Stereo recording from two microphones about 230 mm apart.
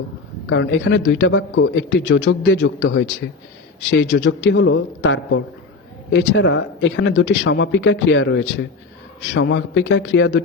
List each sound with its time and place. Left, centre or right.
0.5 s a man's voice: left